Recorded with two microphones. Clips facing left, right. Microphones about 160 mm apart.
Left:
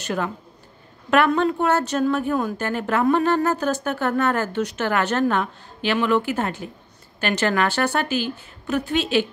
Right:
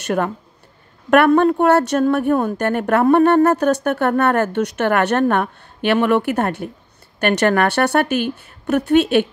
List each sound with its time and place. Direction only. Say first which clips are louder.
0.2 s a woman's voice: right 5 dB; 50° right (ahead or behind)